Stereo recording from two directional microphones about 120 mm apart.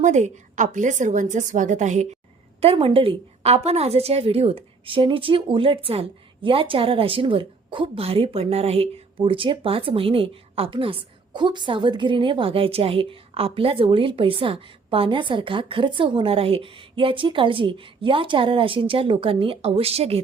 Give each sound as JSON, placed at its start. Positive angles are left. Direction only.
{"t": 0.0, "sound": "a woman's voice", "side_deg": -80}
{"t": 2.6, "sound": "a woman's voice", "side_deg": -50}
{"t": 9.2, "sound": "a woman's voice", "side_deg": -45}